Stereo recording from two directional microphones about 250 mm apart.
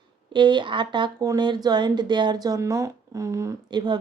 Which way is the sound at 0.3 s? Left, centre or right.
Centre.